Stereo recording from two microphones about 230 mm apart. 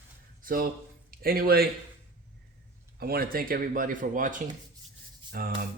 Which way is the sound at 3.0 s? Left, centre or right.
Right.